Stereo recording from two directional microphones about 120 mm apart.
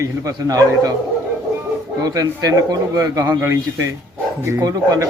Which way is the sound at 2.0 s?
30° right (ahead or behind).